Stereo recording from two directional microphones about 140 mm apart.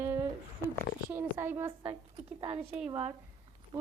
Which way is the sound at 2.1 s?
45° right (ahead or behind).